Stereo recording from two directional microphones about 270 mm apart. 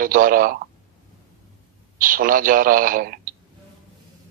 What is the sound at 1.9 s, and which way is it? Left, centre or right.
A man's voice, right.